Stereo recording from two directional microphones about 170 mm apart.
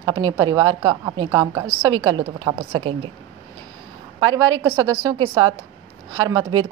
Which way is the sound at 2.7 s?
30° right (ahead or behind).